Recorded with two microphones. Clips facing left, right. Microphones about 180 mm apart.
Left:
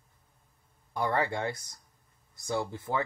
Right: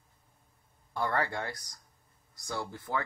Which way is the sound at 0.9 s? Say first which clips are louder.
Left 2 dB; 20° left (ahead or behind).